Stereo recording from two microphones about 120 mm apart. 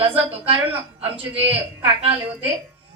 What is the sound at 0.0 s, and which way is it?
Speech, 50° right (ahead or behind).